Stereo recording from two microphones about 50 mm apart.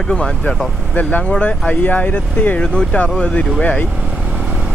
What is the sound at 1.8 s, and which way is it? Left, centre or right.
Speech, left.